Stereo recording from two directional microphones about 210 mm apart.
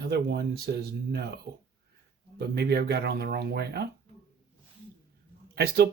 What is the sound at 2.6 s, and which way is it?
Speech, 50° right (ahead or behind).